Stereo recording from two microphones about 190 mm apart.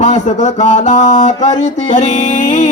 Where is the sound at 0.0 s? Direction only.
35° left (ahead or behind).